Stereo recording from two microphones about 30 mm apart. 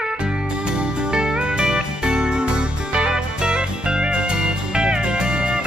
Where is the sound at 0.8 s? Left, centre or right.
Right.